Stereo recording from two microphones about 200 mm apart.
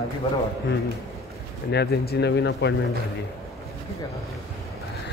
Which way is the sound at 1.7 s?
55° left (ahead or behind).